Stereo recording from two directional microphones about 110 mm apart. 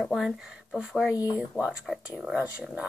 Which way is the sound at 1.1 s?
35° left (ahead or behind).